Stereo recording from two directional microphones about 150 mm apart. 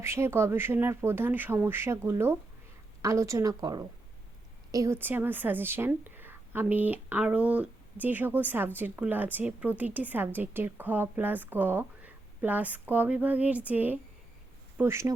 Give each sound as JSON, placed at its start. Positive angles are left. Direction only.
{"t": 0.0, "sound": "a woman's voice", "side_deg": -15}